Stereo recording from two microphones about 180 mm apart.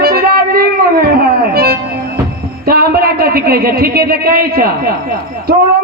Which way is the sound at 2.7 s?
60° right (ahead or behind).